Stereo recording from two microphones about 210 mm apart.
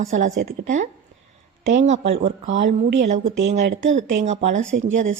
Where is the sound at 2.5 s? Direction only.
65° right (ahead or behind).